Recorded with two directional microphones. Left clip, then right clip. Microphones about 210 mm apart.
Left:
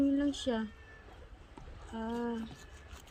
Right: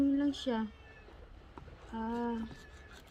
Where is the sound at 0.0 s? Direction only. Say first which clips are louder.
Even; 20° right (ahead or behind).